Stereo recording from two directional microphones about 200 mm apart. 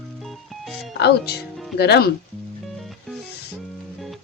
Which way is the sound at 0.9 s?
55° left (ahead or behind).